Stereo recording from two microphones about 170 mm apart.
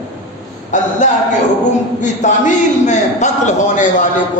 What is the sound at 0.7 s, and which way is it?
Speech, 45° left (ahead or behind).